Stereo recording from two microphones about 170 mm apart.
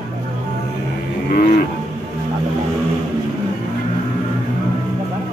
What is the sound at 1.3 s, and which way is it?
Cattle, 50° left (ahead or behind).